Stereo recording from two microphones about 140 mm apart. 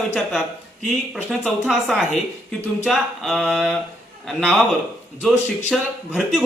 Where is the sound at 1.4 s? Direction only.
Centre (ahead or behind).